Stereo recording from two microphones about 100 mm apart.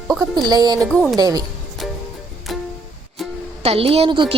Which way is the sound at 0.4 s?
40° right (ahead or behind).